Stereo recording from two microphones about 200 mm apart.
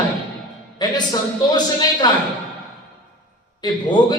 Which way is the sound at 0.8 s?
20° left (ahead or behind).